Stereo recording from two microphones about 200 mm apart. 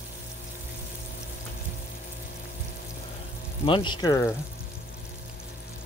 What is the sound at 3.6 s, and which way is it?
Speech, 25° left (ahead or behind).